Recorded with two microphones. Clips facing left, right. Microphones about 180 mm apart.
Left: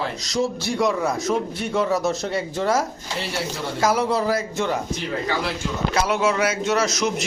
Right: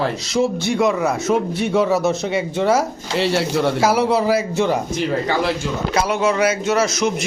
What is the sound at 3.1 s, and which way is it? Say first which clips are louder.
Speech: right 10 dB; 80° right.